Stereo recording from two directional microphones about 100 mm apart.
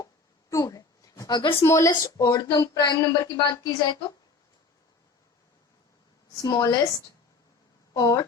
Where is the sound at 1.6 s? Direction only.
30° left (ahead or behind); by 3.9 s 45° left (ahead or behind).